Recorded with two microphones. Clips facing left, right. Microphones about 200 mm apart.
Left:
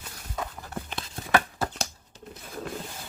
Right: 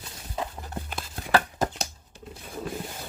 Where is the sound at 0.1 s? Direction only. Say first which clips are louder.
Right 2 dB; 25° right (ahead or behind).